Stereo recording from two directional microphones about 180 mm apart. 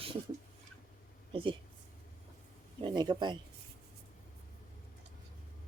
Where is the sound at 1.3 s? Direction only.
30° right (ahead or behind).